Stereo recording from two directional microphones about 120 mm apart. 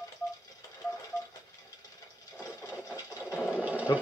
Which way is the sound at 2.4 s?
30° left (ahead or behind).